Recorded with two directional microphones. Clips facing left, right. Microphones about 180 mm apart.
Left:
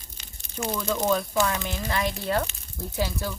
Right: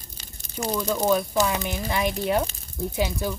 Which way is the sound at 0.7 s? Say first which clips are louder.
Right 3 dB; 15° right (ahead or behind).